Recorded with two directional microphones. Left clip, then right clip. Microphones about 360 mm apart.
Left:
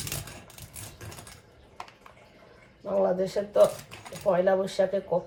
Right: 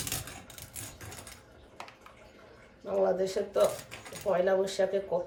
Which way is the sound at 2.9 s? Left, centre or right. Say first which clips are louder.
Left 2 dB; centre.